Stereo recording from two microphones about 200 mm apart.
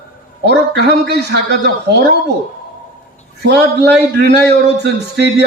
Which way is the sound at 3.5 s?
55° right (ahead or behind).